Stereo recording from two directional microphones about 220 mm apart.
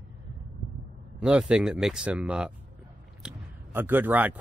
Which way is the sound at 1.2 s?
5° right (ahead or behind).